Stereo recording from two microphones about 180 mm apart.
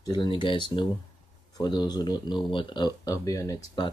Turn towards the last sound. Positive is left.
turn(degrees=20)  # may be behind; listen again after turning